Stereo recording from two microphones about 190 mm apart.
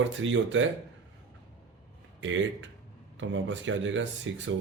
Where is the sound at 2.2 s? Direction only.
80° right.